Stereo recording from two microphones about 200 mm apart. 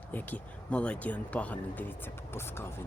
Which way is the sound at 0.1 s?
5° left (ahead or behind).